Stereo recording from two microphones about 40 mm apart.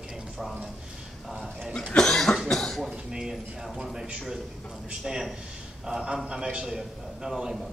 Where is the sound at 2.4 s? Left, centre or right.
Centre.